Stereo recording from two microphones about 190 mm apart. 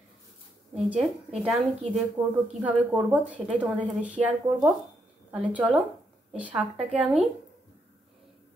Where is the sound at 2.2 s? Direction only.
20° right (ahead or behind).